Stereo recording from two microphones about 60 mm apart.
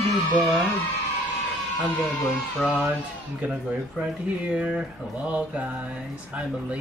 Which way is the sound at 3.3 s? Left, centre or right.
Centre.